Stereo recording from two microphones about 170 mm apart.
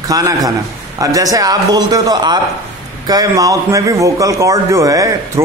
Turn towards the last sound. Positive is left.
turn(degrees=-20)  # may be behind; listen again after turning